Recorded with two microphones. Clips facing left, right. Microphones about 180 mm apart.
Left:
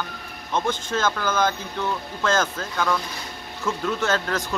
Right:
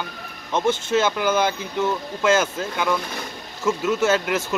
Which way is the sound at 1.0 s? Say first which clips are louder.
Left 2 dB; 15° right (ahead or behind).